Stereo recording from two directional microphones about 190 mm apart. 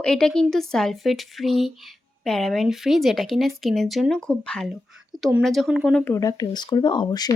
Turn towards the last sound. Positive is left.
turn(degrees=20)  # may be behind; listen again after turning